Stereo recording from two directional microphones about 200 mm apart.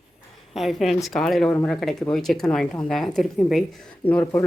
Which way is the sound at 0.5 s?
Centre (ahead or behind).